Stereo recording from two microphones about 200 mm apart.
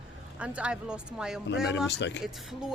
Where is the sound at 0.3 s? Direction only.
5° right (ahead or behind).